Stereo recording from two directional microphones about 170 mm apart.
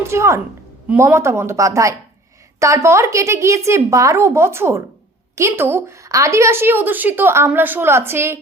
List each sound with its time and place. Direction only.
0.0 s a woman's voice: 15° right (ahead or behind)